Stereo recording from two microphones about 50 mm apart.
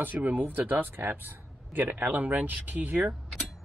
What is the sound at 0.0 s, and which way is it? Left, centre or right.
Speech, right.